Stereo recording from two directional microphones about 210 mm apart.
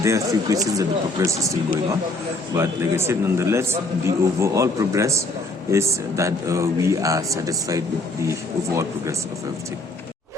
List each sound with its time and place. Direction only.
0.0 s speech: 15° right (ahead or behind)
2.6 s speech: 10° right (ahead or behind)